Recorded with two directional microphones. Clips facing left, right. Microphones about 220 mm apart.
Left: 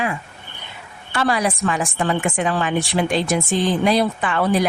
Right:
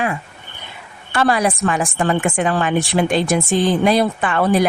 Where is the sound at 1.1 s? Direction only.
55° right (ahead or behind).